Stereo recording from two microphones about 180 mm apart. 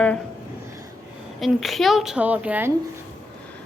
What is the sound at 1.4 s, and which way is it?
Speech, centre (ahead or behind).